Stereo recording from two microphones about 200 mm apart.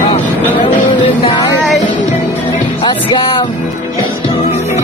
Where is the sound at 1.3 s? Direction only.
20° left (ahead or behind).